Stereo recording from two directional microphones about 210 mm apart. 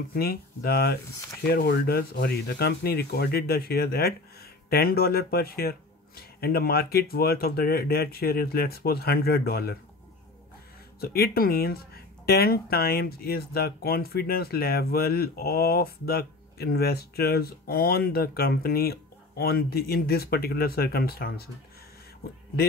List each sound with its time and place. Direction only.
0.1 s speech: 45° left (ahead or behind)
11.0 s speech: 45° left (ahead or behind)